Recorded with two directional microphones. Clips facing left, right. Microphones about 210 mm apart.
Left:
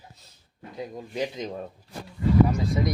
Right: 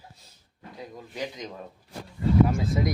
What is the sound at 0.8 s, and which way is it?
Speech, 20° left (ahead or behind).